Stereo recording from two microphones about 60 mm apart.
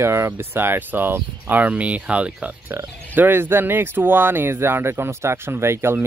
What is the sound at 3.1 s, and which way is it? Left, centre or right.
Speech, right.